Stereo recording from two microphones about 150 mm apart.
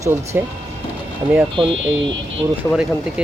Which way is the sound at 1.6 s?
35° right (ahead or behind).